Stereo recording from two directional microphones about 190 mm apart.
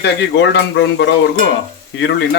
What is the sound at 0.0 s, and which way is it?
Speech, 65° left (ahead or behind).